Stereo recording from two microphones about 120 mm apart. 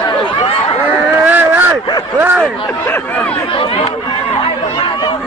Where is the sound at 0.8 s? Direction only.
10° right (ahead or behind).